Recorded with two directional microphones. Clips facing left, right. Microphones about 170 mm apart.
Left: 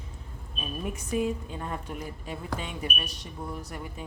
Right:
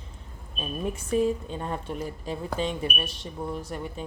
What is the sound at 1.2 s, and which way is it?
Speech, 30° right (ahead or behind).